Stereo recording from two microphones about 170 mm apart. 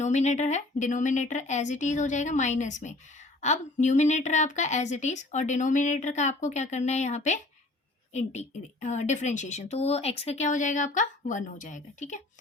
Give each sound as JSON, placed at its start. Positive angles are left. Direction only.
{"t": 0.0, "sound": "a woman's voice", "side_deg": 45}